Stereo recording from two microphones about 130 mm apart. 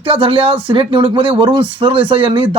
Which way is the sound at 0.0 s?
45° right (ahead or behind).